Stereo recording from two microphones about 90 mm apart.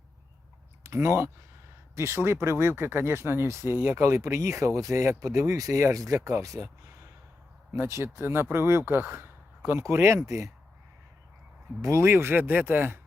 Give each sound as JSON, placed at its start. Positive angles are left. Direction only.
{"t": 0.9, "sound": "speech", "side_deg": -30}
{"t": 7.7, "sound": "speech", "side_deg": -30}
{"t": 11.8, "sound": "speech", "side_deg": -35}